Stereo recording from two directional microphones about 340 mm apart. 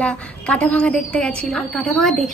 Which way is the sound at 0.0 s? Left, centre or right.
Centre.